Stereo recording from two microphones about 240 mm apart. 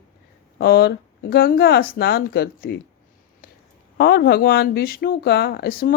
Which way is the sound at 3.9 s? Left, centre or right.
Left.